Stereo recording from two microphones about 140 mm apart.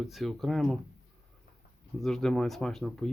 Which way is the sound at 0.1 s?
Centre (ahead or behind).